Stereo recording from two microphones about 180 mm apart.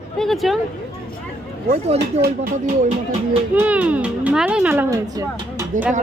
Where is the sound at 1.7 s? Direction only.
35° right (ahead or behind).